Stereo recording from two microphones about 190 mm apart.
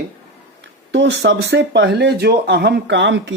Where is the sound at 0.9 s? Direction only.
65° right (ahead or behind).